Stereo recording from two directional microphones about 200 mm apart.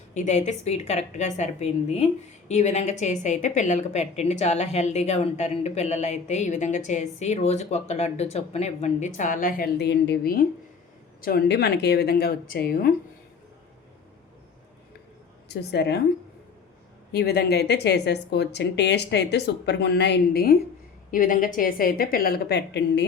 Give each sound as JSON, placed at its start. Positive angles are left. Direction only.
{"t": 0.1, "sound": "a woman's voice", "side_deg": 35}
{"t": 15.4, "sound": "a woman's voice", "side_deg": 55}
{"t": 17.1, "sound": "a woman's voice", "side_deg": 55}